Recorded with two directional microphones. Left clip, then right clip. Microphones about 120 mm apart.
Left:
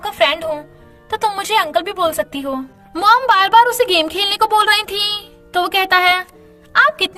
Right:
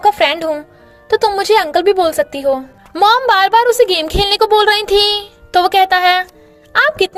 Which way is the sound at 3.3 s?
60° right (ahead or behind).